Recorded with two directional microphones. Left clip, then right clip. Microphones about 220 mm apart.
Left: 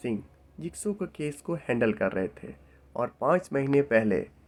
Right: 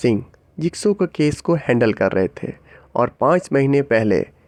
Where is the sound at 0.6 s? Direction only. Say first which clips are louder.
Right 15 dB; 45° right (ahead or behind).